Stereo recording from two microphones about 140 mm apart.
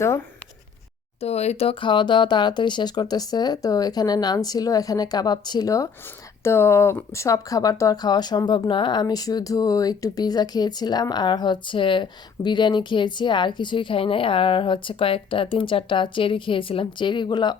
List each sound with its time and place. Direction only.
1.2 s speech: 50° left (ahead or behind); by 17.6 s 30° left (ahead or behind)